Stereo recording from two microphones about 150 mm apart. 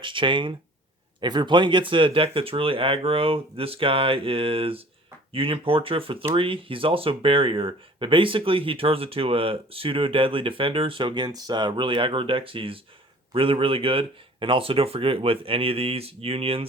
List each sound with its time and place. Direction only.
0.0 s speech: 35° right (ahead or behind)